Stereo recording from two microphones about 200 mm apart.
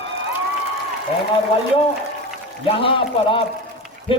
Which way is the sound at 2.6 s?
25° left (ahead or behind).